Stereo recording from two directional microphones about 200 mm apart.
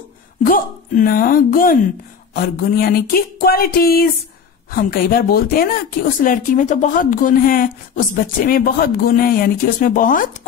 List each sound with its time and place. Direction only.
0.5 s speech: 45° left (ahead or behind)